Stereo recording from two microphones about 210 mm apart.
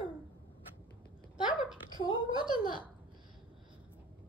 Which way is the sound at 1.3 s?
25° left (ahead or behind).